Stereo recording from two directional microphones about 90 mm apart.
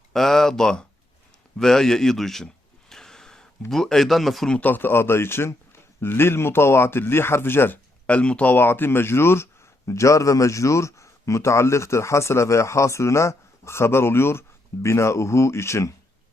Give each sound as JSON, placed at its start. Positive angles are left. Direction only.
{"t": 0.1, "sound": "a man's voice", "side_deg": 5}
{"t": 2.9, "sound": "gasp", "side_deg": 5}
{"t": 3.7, "sound": "a man's voice", "side_deg": 5}
{"t": 4.5, "sound": "speech", "side_deg": 20}
{"t": 8.0, "sound": "speech", "side_deg": 15}